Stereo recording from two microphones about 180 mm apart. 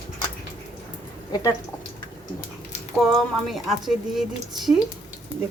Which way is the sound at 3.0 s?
Centre (ahead or behind).